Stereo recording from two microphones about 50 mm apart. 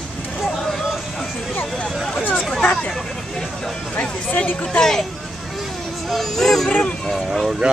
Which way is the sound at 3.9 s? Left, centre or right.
Left.